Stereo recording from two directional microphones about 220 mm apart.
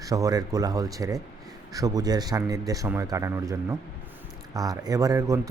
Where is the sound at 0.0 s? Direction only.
15° right (ahead or behind).